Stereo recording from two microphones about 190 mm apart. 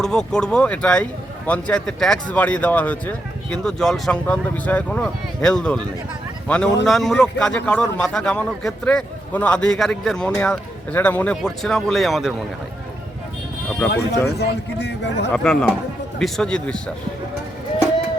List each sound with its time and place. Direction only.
0.0 s a man's voice: 5° left (ahead or behind)
13.9 s a man's voice: 60° left (ahead or behind)
15.3 s a man's voice: centre (ahead or behind)